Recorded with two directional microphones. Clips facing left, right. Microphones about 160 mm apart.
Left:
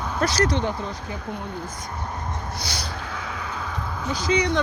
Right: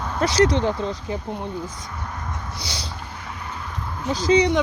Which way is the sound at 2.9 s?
90° left.